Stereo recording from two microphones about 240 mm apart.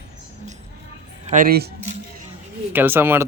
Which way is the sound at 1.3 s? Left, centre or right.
Right.